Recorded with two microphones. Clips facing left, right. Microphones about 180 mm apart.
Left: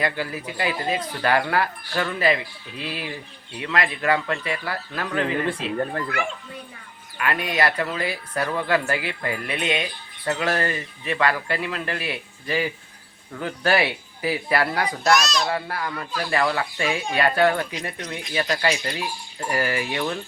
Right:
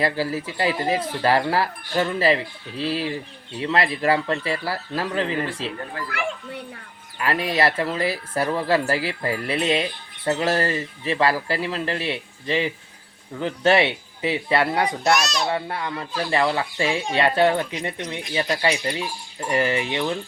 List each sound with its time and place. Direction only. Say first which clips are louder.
0.0 s speech: right 3 dB; 30° right (ahead or behind)
7.2 s speech: right 2 dB; 30° right (ahead or behind)